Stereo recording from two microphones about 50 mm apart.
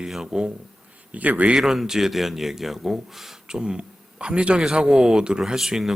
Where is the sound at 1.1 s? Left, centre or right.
Right.